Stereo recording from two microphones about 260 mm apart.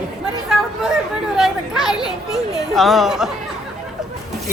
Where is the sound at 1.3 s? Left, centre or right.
Centre.